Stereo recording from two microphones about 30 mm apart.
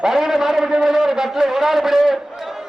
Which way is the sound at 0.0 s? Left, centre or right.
Centre.